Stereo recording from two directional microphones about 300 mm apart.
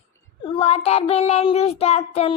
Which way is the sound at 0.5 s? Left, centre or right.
Centre.